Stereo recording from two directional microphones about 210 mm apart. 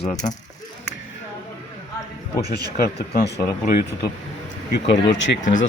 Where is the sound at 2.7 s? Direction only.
45° left (ahead or behind).